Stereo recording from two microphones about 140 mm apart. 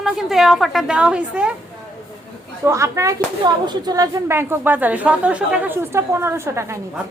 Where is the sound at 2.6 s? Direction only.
20° right (ahead or behind).